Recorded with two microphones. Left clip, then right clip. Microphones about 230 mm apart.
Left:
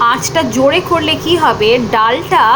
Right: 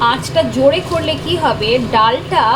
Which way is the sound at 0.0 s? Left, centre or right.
Centre.